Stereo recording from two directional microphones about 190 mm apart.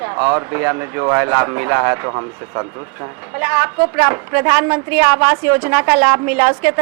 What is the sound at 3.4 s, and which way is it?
Speech, 5° right (ahead or behind).